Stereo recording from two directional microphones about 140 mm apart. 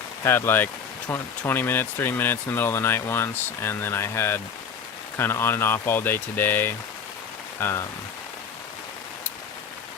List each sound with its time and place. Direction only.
0.3 s speech: 15° left (ahead or behind)